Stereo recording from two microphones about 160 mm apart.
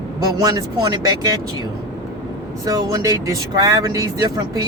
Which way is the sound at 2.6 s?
20° right (ahead or behind).